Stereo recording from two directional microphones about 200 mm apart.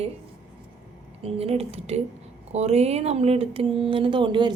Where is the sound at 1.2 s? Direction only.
30° right (ahead or behind).